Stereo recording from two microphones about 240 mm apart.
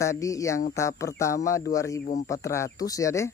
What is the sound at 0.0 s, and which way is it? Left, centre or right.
Speech, centre.